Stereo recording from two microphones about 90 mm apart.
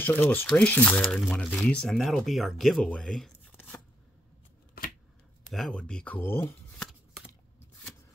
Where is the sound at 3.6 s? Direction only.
25° left (ahead or behind).